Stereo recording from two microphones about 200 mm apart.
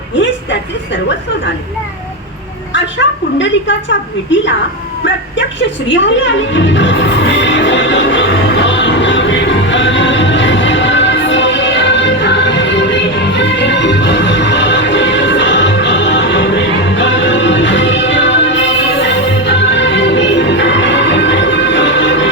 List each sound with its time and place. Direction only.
3.3 s a woman's voice: 65° left (ahead or behind)
5.9 s music: 65° left (ahead or behind)